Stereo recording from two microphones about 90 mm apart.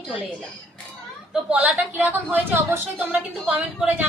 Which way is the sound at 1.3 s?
15° right (ahead or behind).